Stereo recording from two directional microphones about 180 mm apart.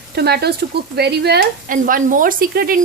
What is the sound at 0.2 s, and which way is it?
A woman's voice, 60° right (ahead or behind).